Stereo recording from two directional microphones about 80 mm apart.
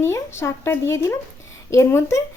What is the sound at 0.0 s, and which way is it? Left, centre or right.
Speech, left.